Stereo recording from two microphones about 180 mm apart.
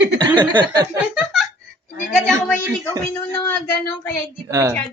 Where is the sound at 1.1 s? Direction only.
5° right (ahead or behind).